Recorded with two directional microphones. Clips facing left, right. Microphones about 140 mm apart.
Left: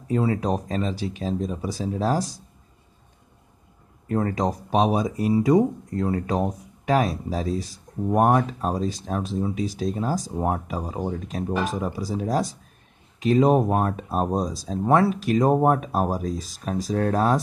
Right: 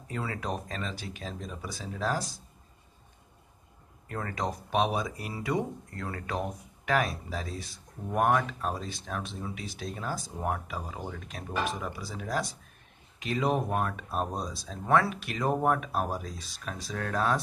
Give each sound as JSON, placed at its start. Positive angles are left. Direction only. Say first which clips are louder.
{"t": 0.1, "sound": "speech", "louder": "left 11 dB", "side_deg": 30}
{"t": 4.1, "sound": "speech", "louder": "left 10 dB", "side_deg": 35}